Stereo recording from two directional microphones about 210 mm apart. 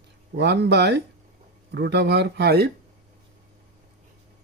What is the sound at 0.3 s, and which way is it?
Speech, 55° right (ahead or behind).